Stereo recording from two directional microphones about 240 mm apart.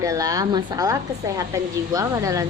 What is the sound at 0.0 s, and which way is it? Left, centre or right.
A woman's voice, centre.